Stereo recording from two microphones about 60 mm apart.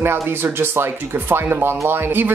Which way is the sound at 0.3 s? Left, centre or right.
Right.